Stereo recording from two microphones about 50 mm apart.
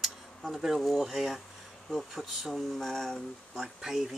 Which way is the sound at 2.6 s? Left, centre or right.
Centre.